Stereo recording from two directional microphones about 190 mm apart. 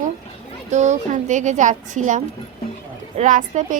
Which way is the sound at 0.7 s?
40° right (ahead or behind).